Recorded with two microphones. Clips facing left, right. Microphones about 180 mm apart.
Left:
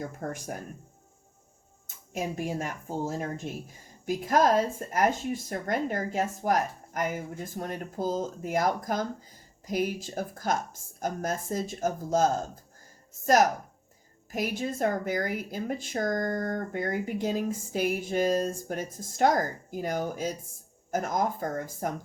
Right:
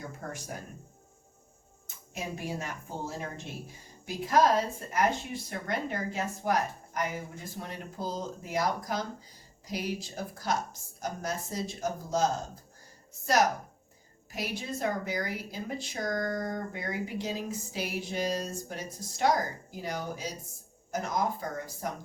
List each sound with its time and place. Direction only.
0.2 s speech: 45° left (ahead or behind)
2.1 s speech: 45° left (ahead or behind)
14.3 s speech: 50° left (ahead or behind)